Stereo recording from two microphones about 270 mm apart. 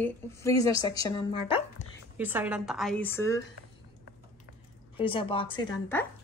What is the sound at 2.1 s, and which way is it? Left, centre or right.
Speech, centre.